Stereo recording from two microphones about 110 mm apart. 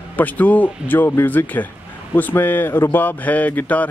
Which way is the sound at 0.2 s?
15° left (ahead or behind).